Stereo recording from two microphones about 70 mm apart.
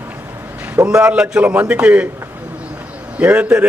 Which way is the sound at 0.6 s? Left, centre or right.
Centre.